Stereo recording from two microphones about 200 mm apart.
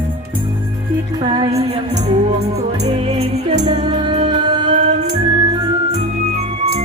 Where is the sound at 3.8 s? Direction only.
25° right (ahead or behind).